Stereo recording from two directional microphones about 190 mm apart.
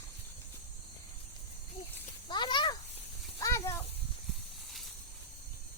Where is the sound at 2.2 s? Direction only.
25° left (ahead or behind).